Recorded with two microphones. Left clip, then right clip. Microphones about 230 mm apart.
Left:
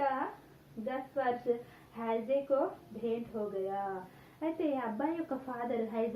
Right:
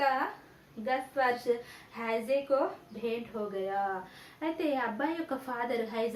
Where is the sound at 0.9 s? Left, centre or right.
Right.